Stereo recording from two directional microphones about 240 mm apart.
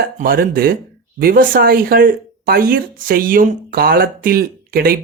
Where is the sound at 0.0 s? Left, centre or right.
Right.